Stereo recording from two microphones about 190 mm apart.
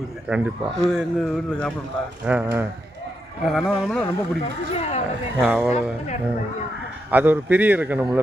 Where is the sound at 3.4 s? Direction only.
Centre (ahead or behind).